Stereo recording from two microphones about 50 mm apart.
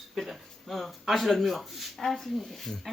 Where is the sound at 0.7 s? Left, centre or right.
Centre.